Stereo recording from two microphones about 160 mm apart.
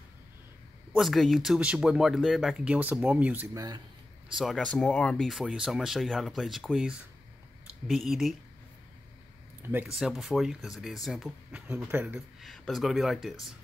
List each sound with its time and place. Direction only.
0.9 s speech: centre (ahead or behind)
3.5 s speech: 25° right (ahead or behind)
4.4 s speech: centre (ahead or behind)
9.6 s speech: 10° right (ahead or behind)